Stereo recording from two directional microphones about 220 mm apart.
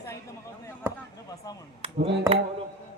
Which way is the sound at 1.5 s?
15° left (ahead or behind).